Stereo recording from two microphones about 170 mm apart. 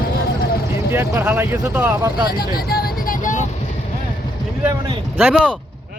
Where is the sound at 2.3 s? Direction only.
60° left (ahead or behind).